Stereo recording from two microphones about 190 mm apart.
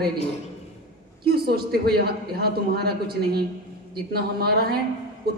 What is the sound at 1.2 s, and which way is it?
A man's voice, 55° right (ahead or behind).